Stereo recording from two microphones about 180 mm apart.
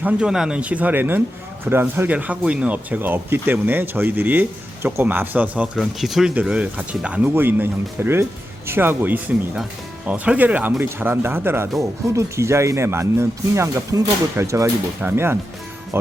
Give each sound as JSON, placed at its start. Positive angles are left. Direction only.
{"t": 0.0, "sound": "speech", "side_deg": -5}